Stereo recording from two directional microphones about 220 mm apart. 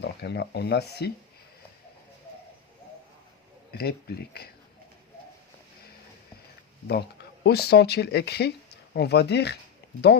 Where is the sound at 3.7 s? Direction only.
45° left (ahead or behind).